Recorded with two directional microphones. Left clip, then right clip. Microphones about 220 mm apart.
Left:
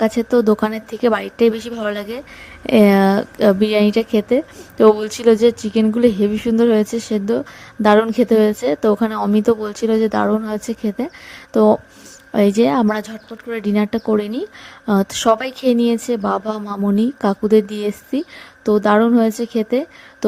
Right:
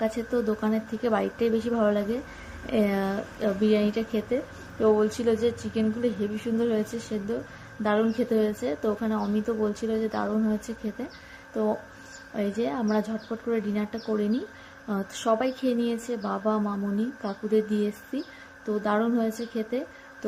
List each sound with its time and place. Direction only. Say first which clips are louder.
0.0 s a woman's voice: left 12 dB; 50° left (ahead or behind)